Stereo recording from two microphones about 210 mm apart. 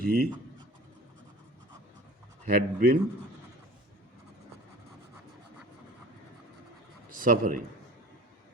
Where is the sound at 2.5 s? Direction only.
45° right (ahead or behind).